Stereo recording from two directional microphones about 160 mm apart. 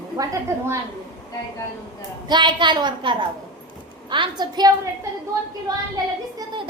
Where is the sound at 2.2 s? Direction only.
30° right (ahead or behind).